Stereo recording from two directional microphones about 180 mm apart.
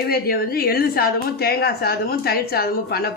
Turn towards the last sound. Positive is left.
turn(degrees=60)  # may be behind; listen again after turning